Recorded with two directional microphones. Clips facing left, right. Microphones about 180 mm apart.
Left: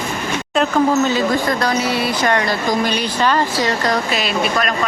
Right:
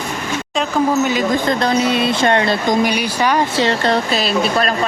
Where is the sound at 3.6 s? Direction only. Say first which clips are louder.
Right 2 dB; 25° right (ahead or behind).